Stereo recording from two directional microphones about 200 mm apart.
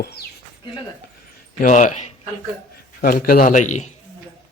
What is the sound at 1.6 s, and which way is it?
Speech, 40° left (ahead or behind).